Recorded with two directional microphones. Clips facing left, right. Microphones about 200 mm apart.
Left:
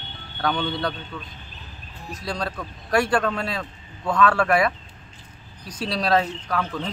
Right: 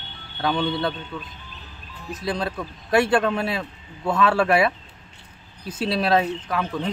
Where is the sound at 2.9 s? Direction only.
25° right (ahead or behind).